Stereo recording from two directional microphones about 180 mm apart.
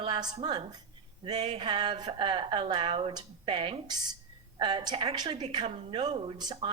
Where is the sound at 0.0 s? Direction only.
25° right (ahead or behind).